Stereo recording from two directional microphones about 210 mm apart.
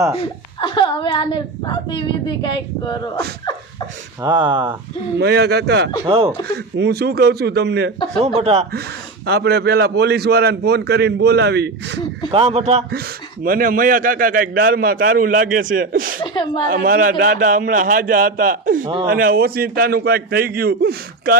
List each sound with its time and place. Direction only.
0.6 s a woman's voice: 20° left (ahead or behind)
4.2 s speech: 20° right (ahead or behind)
5.2 s a man's voice: 50° right (ahead or behind)
6.1 s speech: 30° right (ahead or behind)
6.7 s a man's voice: 50° right (ahead or behind)
8.4 s speech: 30° right (ahead or behind)
9.2 s a man's voice: 50° right (ahead or behind)
12.3 s speech: 30° right (ahead or behind)
12.9 s a man's voice: 45° right (ahead or behind)
16.2 s a woman's voice: 20° left (ahead or behind)
16.6 s a man's voice: 45° right (ahead or behind)